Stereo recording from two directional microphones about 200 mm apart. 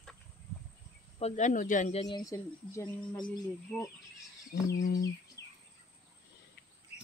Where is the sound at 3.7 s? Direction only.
5° left (ahead or behind).